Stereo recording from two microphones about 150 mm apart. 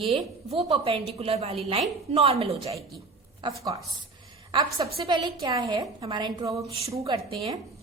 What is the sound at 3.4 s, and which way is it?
A woman's voice, 30° right (ahead or behind).